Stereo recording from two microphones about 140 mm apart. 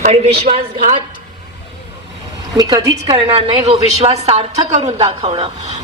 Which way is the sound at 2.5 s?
30° right (ahead or behind).